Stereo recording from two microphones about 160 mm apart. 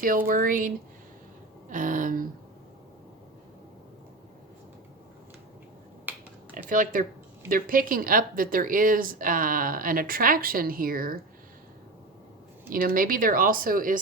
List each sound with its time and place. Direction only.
0.3 s speech: 60° right (ahead or behind)
1.7 s speech: 55° right (ahead or behind)
6.1 s finger snapping: 10° right (ahead or behind)
6.7 s speech: 55° right (ahead or behind)
12.7 s speech: 60° right (ahead or behind)